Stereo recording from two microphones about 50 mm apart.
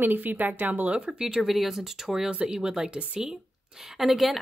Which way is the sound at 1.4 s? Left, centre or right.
Centre.